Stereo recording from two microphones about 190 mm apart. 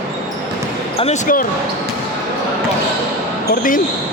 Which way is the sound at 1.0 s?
40° left (ahead or behind).